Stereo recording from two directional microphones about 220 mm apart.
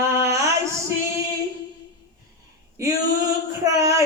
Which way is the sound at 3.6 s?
15° right (ahead or behind).